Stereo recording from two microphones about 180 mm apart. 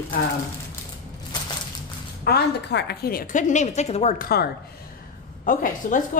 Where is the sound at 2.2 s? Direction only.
65° left (ahead or behind); by 4.2 s 35° left (ahead or behind).